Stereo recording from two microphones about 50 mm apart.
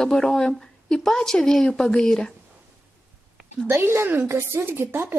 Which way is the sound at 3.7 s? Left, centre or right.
Right.